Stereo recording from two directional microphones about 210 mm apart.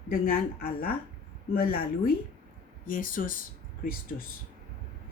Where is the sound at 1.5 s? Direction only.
45° left (ahead or behind).